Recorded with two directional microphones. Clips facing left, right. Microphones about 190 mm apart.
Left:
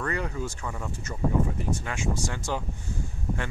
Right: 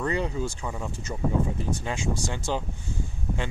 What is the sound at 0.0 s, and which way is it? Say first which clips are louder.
Speech: right 3 dB; 20° right (ahead or behind).